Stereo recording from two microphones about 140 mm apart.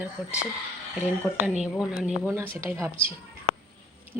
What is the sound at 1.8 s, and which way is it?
Speech, 5° right (ahead or behind).